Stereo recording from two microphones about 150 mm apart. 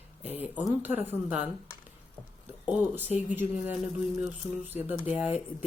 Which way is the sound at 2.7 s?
10° right (ahead or behind).